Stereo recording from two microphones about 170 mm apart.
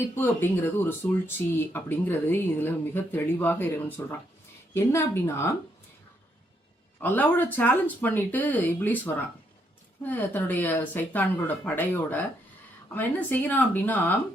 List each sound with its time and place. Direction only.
0.2 s speech: 10° left (ahead or behind)
7.0 s speech: 10° left (ahead or behind)